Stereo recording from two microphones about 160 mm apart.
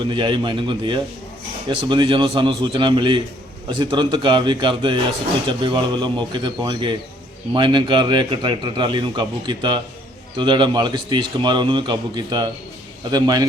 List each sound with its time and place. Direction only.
0.0 s a man's voice: 30° right (ahead or behind)